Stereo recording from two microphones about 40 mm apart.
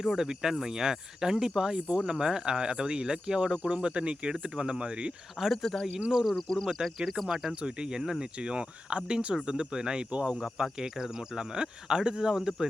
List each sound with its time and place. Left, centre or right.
0.0 s speech: centre
5.4 s speech: centre
6.2 s speech: centre
6.7 s speech: centre
7.5 s speech: right